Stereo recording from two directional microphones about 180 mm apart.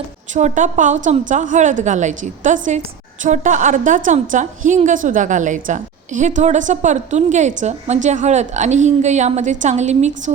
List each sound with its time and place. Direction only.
0.3 s a woman's voice: 45° right (ahead or behind)